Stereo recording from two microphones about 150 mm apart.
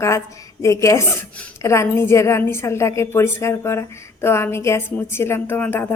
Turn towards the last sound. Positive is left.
turn(degrees=15)  # may be behind; listen again after turning